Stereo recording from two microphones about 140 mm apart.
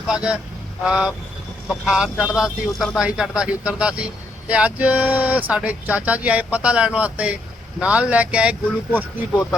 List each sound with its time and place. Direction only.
0.1 s speech: 5° right (ahead or behind)
0.9 s vehicle: 5° right (ahead or behind)
1.6 s speech: 5° right (ahead or behind)